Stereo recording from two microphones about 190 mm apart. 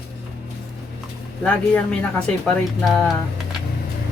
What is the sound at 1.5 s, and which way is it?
Speech, 5° left (ahead or behind).